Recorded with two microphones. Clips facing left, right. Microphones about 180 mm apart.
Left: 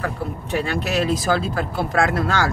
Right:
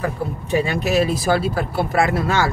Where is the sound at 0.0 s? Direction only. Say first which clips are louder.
Right 2 dB; 15° right (ahead or behind).